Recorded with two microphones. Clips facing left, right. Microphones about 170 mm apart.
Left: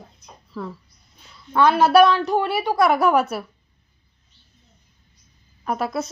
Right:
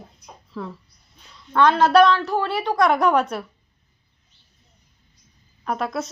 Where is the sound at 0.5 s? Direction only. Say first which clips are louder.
Left 1 dB; centre (ahead or behind).